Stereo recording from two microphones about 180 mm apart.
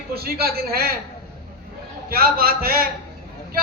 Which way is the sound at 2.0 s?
60° right (ahead or behind).